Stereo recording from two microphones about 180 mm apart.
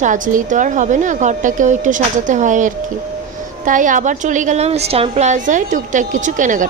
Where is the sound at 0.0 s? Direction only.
45° right (ahead or behind).